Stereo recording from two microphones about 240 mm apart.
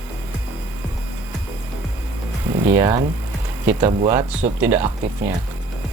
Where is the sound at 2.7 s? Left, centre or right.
Centre.